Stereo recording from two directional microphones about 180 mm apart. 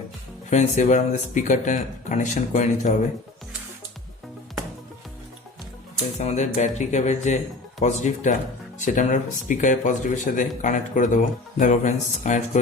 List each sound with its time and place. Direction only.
0.5 s speech: 40° left (ahead or behind)
6.1 s speech: 40° left (ahead or behind)